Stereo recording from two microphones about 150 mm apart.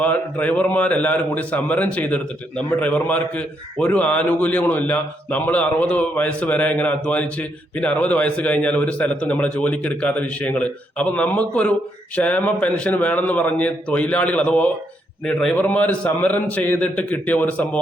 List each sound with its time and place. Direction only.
0.0 s a man's voice: 10° left (ahead or behind)